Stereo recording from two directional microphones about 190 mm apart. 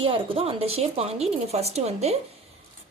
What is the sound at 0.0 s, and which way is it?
A woman's voice, 30° right (ahead or behind).